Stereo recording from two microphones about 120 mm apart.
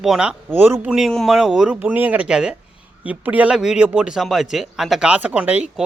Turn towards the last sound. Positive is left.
turn(degrees=-10)  # may be behind; listen again after turning